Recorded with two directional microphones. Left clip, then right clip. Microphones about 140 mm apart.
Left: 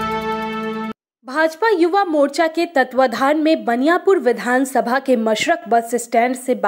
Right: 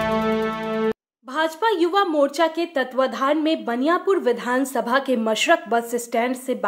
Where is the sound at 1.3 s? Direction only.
25° left (ahead or behind).